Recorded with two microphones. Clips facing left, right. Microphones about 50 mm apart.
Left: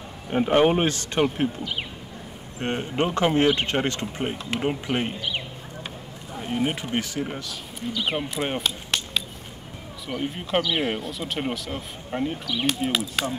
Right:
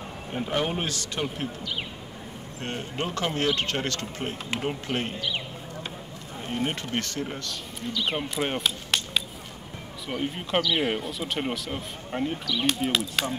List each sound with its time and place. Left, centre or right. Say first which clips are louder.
0.3 s speech: left 9 dB; left; by 8.2 s centre
8.2 s a sound: left 1 dB; centre
10.0 s speech: left 1 dB; centre